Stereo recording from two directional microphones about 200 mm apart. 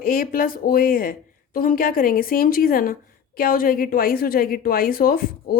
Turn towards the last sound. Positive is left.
turn(degrees=45)  # may be behind; listen again after turning